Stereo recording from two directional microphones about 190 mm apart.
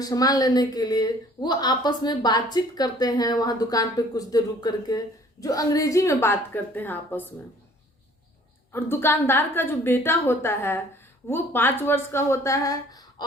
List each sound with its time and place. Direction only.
0.0 s a woman's voice: 20° left (ahead or behind)
8.7 s a woman's voice: 10° left (ahead or behind)